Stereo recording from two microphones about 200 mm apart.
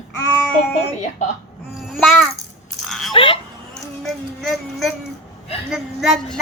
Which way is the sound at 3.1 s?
25° left (ahead or behind).